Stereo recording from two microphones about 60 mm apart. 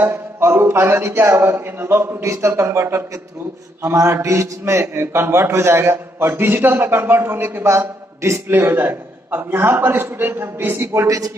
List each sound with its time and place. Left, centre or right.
0.0 s a man's voice: right
3.8 s a man's voice: right
8.2 s a man's voice: right
8.5 s a man's voice: right
11.1 s a man's voice: right